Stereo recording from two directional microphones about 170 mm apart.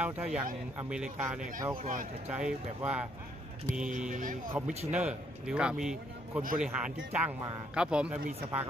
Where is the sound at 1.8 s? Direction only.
50° right (ahead or behind).